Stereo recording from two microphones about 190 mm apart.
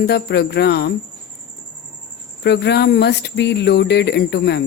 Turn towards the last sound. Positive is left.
turn(degrees=60)  # may be behind; listen again after turning